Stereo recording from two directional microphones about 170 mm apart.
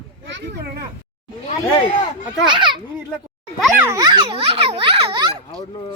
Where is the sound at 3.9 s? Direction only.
25° right (ahead or behind).